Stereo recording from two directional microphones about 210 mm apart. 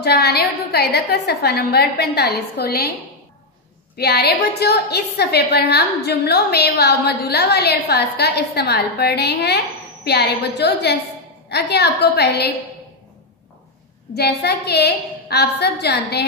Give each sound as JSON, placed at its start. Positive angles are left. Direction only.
{"t": 0.0, "sound": "a woman's voice", "side_deg": 50}
{"t": 3.9, "sound": "a woman's voice", "side_deg": 50}
{"t": 14.1, "sound": "a woman's voice", "side_deg": 50}